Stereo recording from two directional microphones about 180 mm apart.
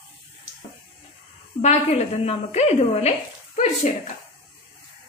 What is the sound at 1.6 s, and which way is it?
A woman's voice, 40° left (ahead or behind).